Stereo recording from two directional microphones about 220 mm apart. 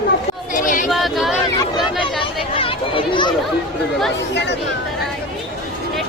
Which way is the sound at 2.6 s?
25° left (ahead or behind).